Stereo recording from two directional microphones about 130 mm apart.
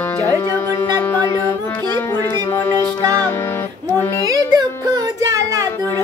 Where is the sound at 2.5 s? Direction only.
15° left (ahead or behind).